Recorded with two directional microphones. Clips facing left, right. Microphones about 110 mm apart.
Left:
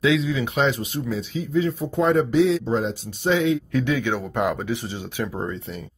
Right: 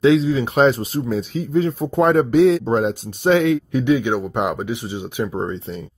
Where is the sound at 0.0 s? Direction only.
35° right (ahead or behind); by 3.5 s 55° right (ahead or behind).